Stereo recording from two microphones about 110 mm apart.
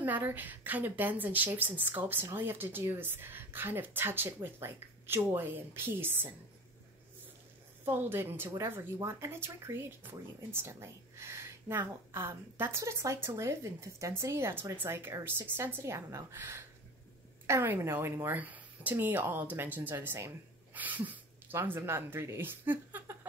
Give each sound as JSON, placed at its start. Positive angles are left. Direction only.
{"t": 0.0, "sound": "speech", "side_deg": -20}
{"t": 7.8, "sound": "speech", "side_deg": -20}